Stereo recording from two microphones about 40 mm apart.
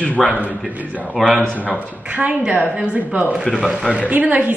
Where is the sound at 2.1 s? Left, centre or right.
Right.